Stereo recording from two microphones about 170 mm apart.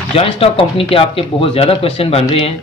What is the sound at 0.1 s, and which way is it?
Speech, 35° left (ahead or behind).